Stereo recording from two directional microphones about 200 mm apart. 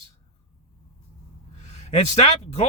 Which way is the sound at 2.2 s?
30° left (ahead or behind).